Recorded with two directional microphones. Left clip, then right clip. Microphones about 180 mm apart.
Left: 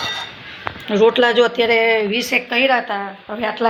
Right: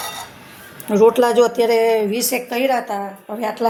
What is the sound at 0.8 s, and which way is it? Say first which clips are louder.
A woman's voice: even; 20° right (ahead or behind).